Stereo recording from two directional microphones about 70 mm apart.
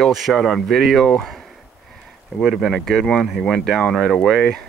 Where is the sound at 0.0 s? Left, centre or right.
Centre.